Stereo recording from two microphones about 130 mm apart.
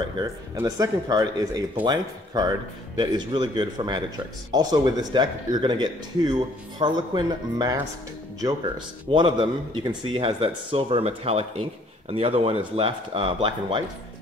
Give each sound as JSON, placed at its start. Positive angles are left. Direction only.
{"t": 0.6, "sound": "speech", "side_deg": -25}